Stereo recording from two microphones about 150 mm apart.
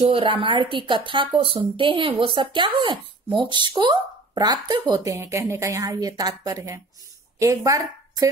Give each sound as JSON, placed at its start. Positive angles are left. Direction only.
{"t": 0.0, "sound": "a woman's voice", "side_deg": -40}